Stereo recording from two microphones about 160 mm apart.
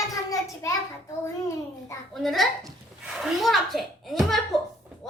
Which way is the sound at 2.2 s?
Centre (ahead or behind).